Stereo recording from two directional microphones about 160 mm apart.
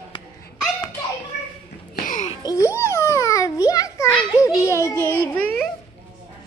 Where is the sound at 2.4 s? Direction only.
20° left (ahead or behind).